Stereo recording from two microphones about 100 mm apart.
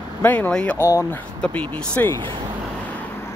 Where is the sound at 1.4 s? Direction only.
15° left (ahead or behind).